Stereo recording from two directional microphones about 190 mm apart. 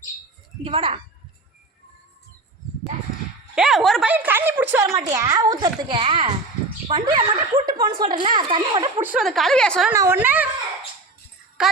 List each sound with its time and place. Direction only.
0.6 s a child's voice: 30° right (ahead or behind)
3.5 s a woman's voice: centre (ahead or behind); by 8.9 s 25° right (ahead or behind)
9.0 s a woman's voice: centre (ahead or behind)
9.9 s a woman's voice: 15° right (ahead or behind)
11.6 s music: 5° right (ahead or behind)